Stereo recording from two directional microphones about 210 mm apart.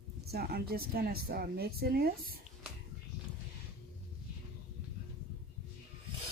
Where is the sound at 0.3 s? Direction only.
50° right (ahead or behind).